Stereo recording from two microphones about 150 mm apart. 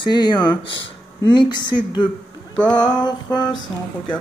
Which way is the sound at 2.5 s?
5° left (ahead or behind).